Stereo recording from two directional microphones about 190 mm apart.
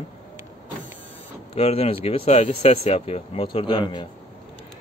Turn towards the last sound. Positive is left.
turn(degrees=25)  # may be behind; listen again after turning